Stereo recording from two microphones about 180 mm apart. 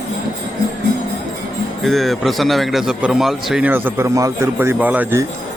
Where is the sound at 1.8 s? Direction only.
Centre (ahead or behind).